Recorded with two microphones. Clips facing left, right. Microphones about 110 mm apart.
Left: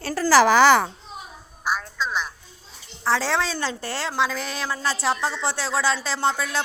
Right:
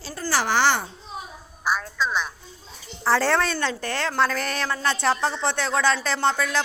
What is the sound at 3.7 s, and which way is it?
Speech, 30° left (ahead or behind).